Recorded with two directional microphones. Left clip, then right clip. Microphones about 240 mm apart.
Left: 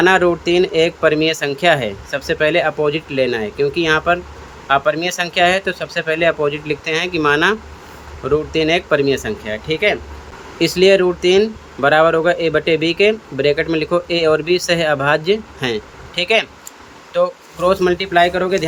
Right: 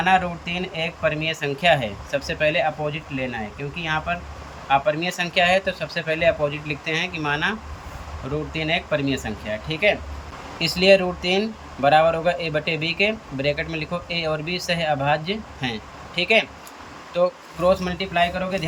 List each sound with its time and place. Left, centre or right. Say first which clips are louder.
0.0 s speech: left 7 dB; left
8.5 s speech: left 6 dB; centre